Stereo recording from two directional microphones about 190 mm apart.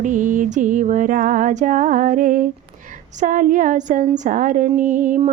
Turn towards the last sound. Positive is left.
turn(degrees=-45)  # may be behind; listen again after turning